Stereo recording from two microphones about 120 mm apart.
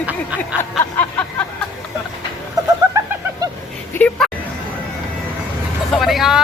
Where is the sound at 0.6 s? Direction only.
15° left (ahead or behind).